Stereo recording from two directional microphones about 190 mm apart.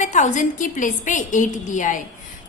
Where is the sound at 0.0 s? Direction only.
40° left (ahead or behind).